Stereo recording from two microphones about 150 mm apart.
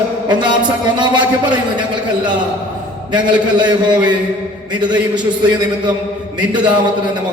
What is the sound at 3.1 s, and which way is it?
Speech, 30° right (ahead or behind).